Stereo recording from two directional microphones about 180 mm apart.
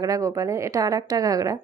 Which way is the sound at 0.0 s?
20° right (ahead or behind).